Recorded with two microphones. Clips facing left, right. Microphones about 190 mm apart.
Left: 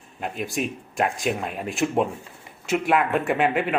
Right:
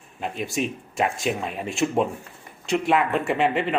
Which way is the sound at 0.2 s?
Centre (ahead or behind).